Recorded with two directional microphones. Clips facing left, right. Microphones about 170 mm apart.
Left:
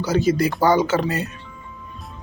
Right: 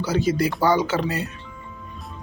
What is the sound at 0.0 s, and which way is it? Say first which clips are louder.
Speech: left 3 dB; 45° left (ahead or behind).